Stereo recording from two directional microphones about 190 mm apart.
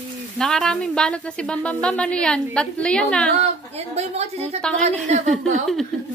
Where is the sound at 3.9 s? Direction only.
35° right (ahead or behind).